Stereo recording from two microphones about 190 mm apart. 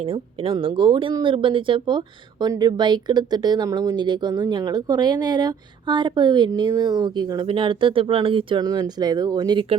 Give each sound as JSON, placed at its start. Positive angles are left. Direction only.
{"t": 0.0, "sound": "speech", "side_deg": -30}